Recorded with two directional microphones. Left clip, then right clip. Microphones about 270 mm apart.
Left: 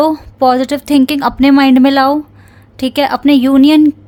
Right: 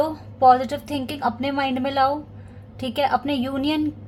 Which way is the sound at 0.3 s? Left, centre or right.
Left.